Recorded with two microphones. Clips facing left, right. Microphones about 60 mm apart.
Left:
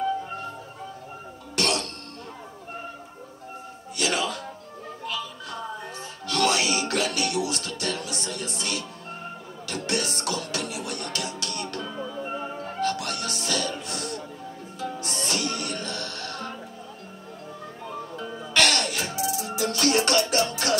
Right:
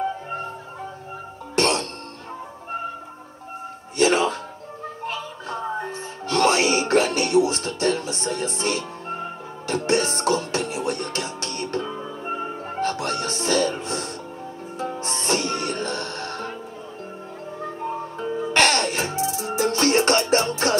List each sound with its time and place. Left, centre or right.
1.5 s music: right
3.9 s a sound: right
5.0 s music: right
17.7 s music: right